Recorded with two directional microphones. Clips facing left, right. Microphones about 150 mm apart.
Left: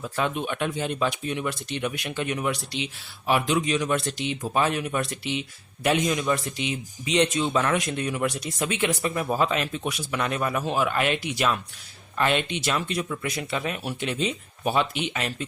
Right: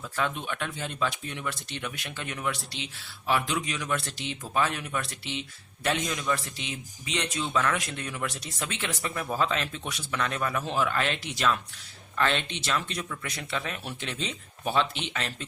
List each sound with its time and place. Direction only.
0.0 s speech: 15° left (ahead or behind)